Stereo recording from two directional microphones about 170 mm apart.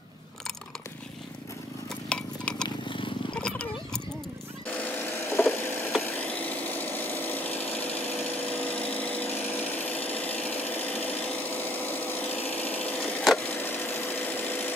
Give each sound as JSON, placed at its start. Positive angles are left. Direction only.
{"t": 2.0, "sound": "stir", "side_deg": 5}
{"t": 2.6, "sound": "purr", "side_deg": 30}
{"t": 3.3, "sound": "wild animals", "side_deg": 5}
{"t": 5.5, "sound": "a sound", "side_deg": 10}
{"t": 6.1, "sound": "power tool", "side_deg": 10}
{"t": 13.6, "sound": "a sound", "side_deg": 10}